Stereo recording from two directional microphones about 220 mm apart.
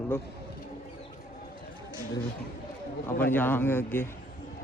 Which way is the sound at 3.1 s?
10° left (ahead or behind).